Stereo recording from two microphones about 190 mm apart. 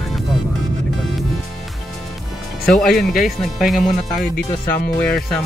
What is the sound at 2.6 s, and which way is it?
Speech, centre (ahead or behind).